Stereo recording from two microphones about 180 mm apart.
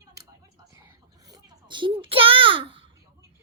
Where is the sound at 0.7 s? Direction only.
15° right (ahead or behind).